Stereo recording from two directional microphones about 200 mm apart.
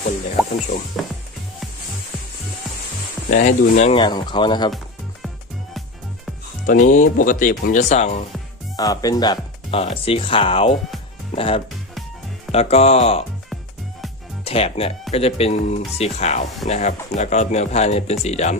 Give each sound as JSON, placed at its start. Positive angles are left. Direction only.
{"t": 3.2, "sound": "speech", "side_deg": 40}
{"t": 6.7, "sound": "speech", "side_deg": 40}
{"t": 8.7, "sound": "speech", "side_deg": 20}
{"t": 14.4, "sound": "speech", "side_deg": 30}